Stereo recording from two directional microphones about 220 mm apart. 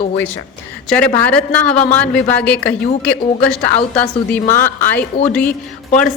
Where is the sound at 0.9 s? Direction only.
5° left (ahead or behind).